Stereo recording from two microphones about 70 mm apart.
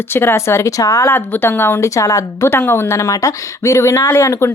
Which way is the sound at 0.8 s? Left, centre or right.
Left.